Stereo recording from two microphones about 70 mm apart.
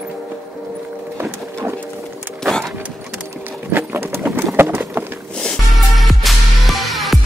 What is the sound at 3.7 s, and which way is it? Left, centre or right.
Bird, right.